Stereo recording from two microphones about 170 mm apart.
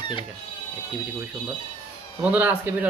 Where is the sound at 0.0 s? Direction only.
30° left (ahead or behind).